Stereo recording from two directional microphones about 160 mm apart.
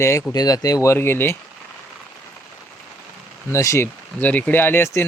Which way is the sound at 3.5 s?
20° left (ahead or behind).